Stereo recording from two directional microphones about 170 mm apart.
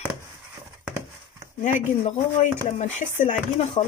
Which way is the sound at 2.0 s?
40° left (ahead or behind).